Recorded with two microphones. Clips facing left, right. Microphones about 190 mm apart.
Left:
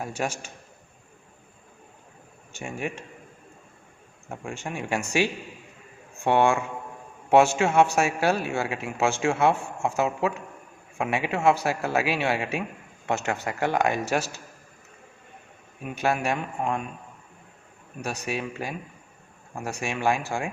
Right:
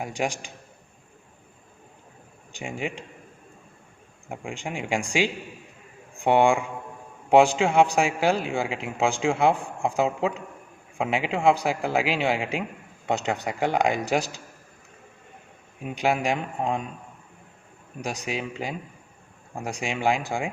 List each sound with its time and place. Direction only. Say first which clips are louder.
0.0 s a man's voice: right 2 dB; 15° right (ahead or behind)
2.5 s a man's voice: right 1 dB; 15° right (ahead or behind)
4.3 s a man's voice: right 1 dB; 15° right (ahead or behind)
15.8 s a man's voice: right 1 dB; 20° right (ahead or behind)
18.0 s a man's voice: even; 15° right (ahead or behind)